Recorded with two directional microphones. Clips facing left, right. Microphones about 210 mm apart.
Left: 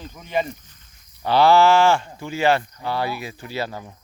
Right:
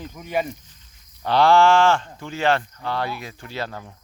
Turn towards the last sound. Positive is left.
turn(degrees=5)  # may be behind; listen again after turning